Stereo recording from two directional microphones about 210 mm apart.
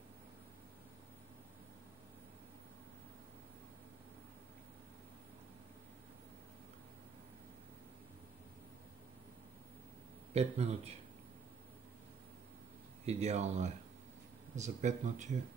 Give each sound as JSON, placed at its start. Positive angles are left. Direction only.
{"t": 10.3, "sound": "speech", "side_deg": -30}
{"t": 13.0, "sound": "speech", "side_deg": -30}